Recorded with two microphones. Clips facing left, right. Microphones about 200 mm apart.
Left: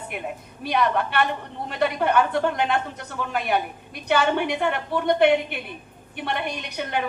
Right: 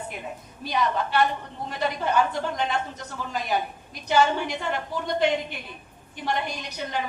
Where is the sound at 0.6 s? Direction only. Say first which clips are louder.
Left 3 dB; 60° left (ahead or behind).